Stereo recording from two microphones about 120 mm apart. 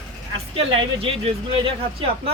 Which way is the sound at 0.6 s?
50° right (ahead or behind).